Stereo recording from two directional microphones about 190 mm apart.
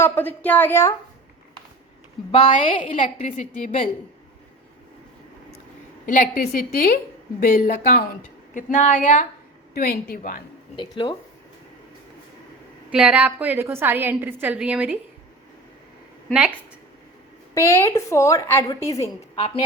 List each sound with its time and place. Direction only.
0.0 s a woman's voice: 10° left (ahead or behind)
2.3 s a woman's voice: 35° left (ahead or behind)
6.1 s a woman's voice: 45° left (ahead or behind)
9.7 s a woman's voice: 50° left (ahead or behind)
10.8 s speech: 25° left (ahead or behind)
12.9 s a woman's voice: 5° right (ahead or behind)
17.5 s a woman's voice: 15° left (ahead or behind)